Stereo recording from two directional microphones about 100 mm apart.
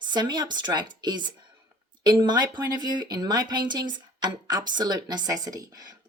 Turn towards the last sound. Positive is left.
turn(degrees=-35)  # may be behind; listen again after turning